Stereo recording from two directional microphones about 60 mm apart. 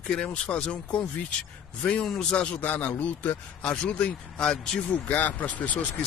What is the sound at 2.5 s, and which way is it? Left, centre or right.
Speech, left.